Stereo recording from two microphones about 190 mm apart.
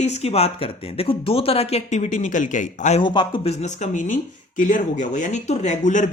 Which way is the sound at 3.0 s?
25° left (ahead or behind).